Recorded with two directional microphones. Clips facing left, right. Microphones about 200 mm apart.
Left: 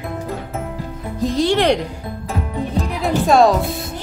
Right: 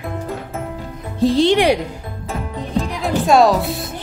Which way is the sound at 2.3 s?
Centre (ahead or behind).